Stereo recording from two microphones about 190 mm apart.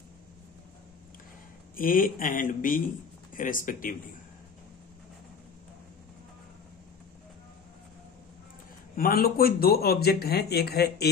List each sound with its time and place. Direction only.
1.8 s speech: 50° left (ahead or behind)
8.9 s speech: 50° left (ahead or behind)